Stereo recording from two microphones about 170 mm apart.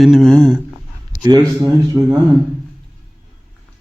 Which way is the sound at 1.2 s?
20° right (ahead or behind).